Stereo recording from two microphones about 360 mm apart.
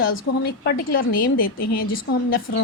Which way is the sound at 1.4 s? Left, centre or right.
Left.